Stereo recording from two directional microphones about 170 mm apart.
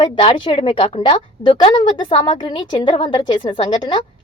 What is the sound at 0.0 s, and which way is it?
A woman's voice, 30° left (ahead or behind).